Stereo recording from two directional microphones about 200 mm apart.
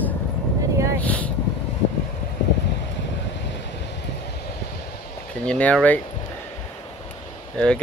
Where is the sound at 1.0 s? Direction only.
5° left (ahead or behind).